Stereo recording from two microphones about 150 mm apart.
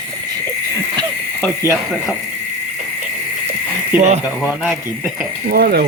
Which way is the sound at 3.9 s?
50° right (ahead or behind).